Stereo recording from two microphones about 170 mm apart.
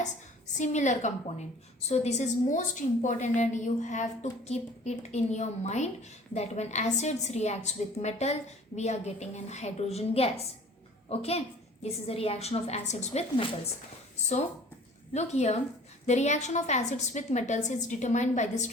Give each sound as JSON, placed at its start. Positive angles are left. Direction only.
{"t": 0.6, "sound": "a woman's voice", "side_deg": 45}
{"t": 15.1, "sound": "a woman's voice", "side_deg": 40}